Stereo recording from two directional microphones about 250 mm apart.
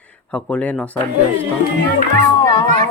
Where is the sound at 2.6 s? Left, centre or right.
Right.